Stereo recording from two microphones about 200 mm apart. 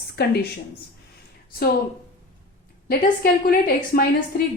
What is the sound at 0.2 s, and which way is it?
Speech, 55° left (ahead or behind).